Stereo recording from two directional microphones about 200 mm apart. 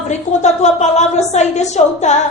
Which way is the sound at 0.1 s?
35° left (ahead or behind).